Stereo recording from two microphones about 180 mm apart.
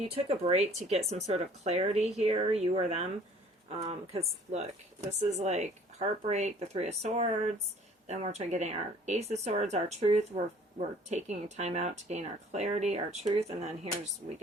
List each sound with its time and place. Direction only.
0.0 s speech: 35° right (ahead or behind)